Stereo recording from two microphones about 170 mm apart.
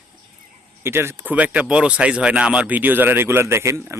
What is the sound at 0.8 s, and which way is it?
Speech, 15° right (ahead or behind).